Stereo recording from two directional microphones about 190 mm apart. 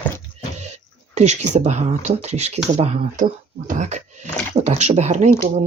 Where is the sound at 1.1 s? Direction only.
35° right (ahead or behind).